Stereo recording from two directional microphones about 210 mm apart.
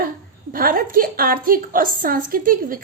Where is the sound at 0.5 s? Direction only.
45° right (ahead or behind).